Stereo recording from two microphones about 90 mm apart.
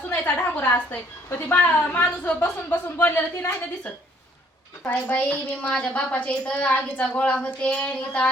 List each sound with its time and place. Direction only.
0.1 s a woman's voice: 20° left (ahead or behind)
4.8 s a woman's voice: 15° left (ahead or behind)